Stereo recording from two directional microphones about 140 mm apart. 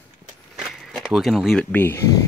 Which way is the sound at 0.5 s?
Centre (ahead or behind).